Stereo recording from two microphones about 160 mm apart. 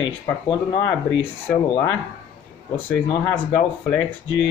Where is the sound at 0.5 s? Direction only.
20° left (ahead or behind).